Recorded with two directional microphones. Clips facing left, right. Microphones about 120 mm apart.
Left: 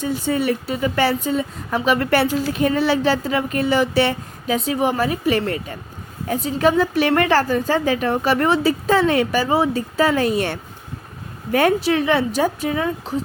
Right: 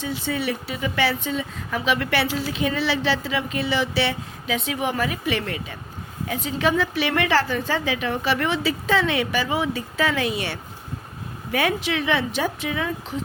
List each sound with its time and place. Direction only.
0.0 s a woman's voice: 45° left (ahead or behind)